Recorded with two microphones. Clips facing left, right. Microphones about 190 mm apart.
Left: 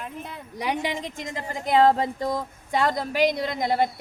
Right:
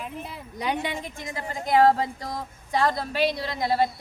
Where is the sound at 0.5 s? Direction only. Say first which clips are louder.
Left 1 dB; 10° left (ahead or behind).